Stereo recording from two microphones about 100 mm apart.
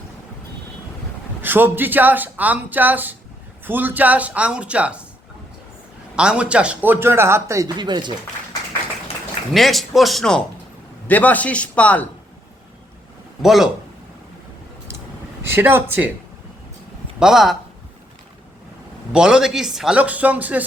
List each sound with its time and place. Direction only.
1.4 s a man's voice: 20° right (ahead or behind)
6.1 s a man's voice: 10° right (ahead or behind); by 7.7 s 30° right (ahead or behind)
7.8 s speech: 50° right (ahead or behind)
9.5 s speech: centre (ahead or behind)
11.1 s a man's voice: 15° left (ahead or behind)
13.4 s speech: 5° right (ahead or behind)
15.5 s a man's voice: 20° right (ahead or behind)
17.2 s speech: 5° right (ahead or behind)
19.1 s a man's voice: 10° right (ahead or behind)